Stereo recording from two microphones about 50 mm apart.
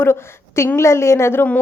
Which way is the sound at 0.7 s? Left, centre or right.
Left.